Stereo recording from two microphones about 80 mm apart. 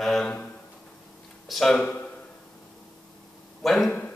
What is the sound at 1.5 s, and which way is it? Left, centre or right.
Speech, centre.